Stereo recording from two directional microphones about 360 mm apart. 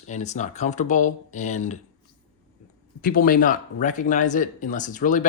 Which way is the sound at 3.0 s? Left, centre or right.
Left.